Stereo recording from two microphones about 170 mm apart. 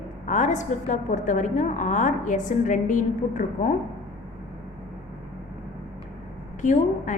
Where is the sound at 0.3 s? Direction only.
45° left (ahead or behind).